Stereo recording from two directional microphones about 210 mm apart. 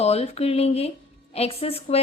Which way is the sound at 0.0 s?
30° left (ahead or behind).